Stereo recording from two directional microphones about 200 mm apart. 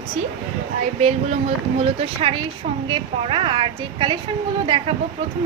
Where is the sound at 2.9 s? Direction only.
25° right (ahead or behind).